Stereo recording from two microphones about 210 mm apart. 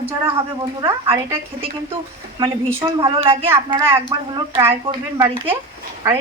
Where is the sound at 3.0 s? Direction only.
25° right (ahead or behind).